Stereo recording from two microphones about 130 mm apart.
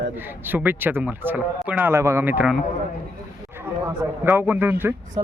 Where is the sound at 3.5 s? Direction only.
15° right (ahead or behind).